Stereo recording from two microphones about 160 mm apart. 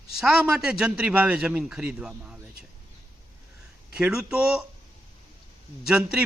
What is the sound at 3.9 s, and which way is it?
Speech, 5° right (ahead or behind).